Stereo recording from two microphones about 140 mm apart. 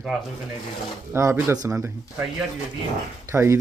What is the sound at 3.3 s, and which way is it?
Speech, 20° right (ahead or behind).